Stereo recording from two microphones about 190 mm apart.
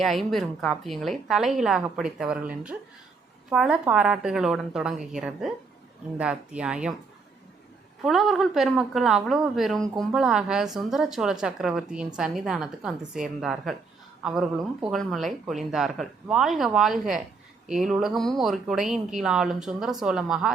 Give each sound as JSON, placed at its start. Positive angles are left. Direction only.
{"t": 0.0, "sound": "a woman's voice", "side_deg": 0}
{"t": 8.0, "sound": "a woman's voice", "side_deg": 0}